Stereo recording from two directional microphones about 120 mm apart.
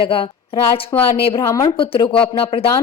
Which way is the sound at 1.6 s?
50° left (ahead or behind).